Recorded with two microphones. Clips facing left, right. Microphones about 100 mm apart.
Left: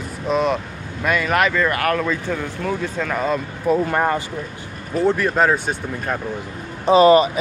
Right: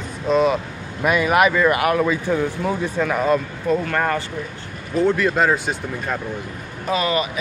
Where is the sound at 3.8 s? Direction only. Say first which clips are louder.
Left 2 dB; 20° left (ahead or behind).